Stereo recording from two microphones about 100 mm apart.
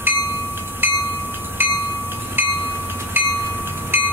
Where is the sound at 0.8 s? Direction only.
20° right (ahead or behind).